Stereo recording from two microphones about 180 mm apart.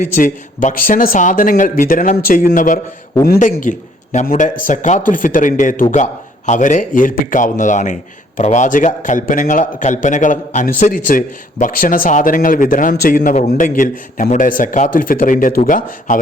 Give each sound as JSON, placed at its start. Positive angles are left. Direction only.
{"t": 0.0, "sound": "a man's voice", "side_deg": 50}